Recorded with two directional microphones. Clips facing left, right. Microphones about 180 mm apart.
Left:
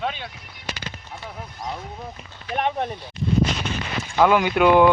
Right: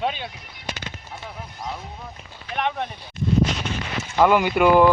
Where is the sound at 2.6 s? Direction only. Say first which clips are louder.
Left 2 dB; 35° left (ahead or behind).